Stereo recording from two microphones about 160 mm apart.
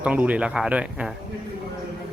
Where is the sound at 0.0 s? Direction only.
10° right (ahead or behind).